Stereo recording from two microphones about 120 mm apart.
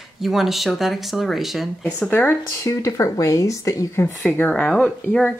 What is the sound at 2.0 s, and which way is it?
Speech, 15° left (ahead or behind).